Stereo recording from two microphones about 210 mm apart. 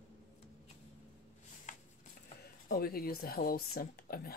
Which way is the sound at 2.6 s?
45° left (ahead or behind).